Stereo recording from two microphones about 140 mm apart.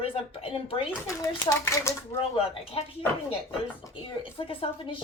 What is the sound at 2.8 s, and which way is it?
Speech, 40° left (ahead or behind).